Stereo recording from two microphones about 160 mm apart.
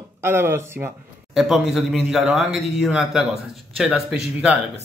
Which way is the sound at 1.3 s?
Centre (ahead or behind).